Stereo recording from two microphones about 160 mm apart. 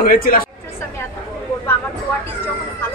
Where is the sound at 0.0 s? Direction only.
60° left (ahead or behind).